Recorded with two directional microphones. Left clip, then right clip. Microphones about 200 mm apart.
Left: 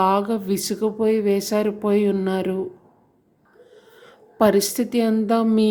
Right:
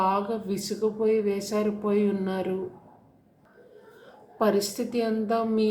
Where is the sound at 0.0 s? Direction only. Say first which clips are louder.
Left 6 dB; 50° left (ahead or behind).